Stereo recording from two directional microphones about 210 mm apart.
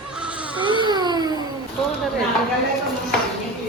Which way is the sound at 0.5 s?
20° right (ahead or behind).